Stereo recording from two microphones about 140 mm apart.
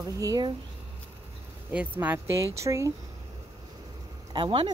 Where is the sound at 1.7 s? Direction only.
10° right (ahead or behind).